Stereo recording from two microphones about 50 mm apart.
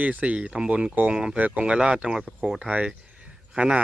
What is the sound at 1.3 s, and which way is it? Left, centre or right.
Speech, right.